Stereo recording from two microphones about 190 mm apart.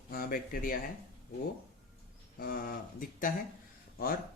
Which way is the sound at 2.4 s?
50° left (ahead or behind).